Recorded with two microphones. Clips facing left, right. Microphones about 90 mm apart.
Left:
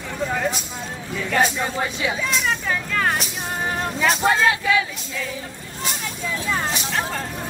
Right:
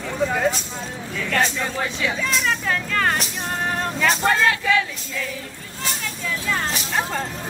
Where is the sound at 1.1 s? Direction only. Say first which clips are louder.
Left 2 dB; 15° left (ahead or behind).